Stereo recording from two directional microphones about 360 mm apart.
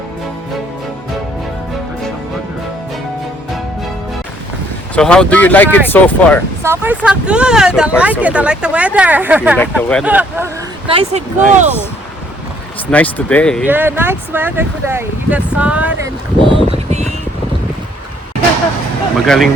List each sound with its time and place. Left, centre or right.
4.9 s speech: centre
6.6 s speech: centre
12.9 s speech: centre
16.4 s a sound: centre
19.1 s speech: centre